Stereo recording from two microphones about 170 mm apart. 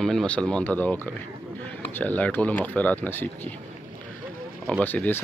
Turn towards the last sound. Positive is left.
turn(degrees=10)  # may be behind; listen again after turning